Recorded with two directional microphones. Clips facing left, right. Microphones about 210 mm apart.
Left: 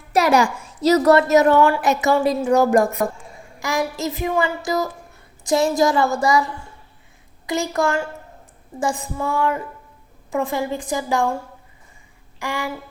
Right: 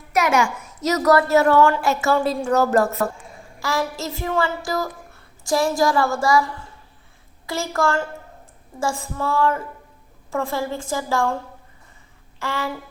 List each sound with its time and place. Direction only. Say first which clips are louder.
0.1 s a woman's voice: left 3 dB; 35° left (ahead or behind); by 4.9 s 20° left (ahead or behind)
5.4 s a sound: left 2 dB; 20° left (ahead or behind)
7.4 s a woman's voice: left 2 dB; 15° left (ahead or behind)
12.4 s a woman's voice: even; 15° left (ahead or behind)